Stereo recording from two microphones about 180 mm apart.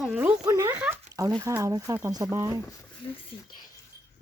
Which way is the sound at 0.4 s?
20° right (ahead or behind).